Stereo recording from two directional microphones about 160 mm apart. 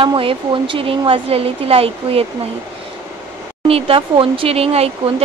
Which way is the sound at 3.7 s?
35° right (ahead or behind).